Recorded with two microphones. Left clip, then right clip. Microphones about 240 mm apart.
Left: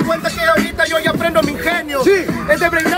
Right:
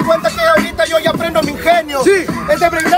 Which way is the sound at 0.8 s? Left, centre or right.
Centre.